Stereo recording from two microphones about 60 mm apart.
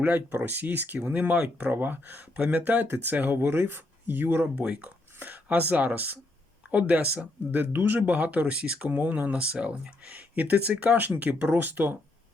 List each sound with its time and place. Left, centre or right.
0.4 s speech: right
4.6 s speech: right